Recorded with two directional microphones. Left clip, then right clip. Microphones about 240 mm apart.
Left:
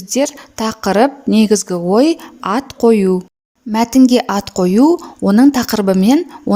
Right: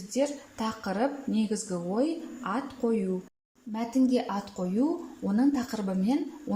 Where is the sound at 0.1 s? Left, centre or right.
Left.